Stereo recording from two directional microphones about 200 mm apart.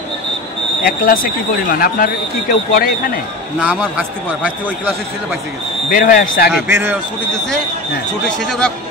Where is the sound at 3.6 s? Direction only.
5° right (ahead or behind).